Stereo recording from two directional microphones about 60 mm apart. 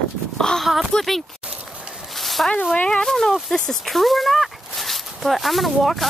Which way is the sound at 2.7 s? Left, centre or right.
Centre.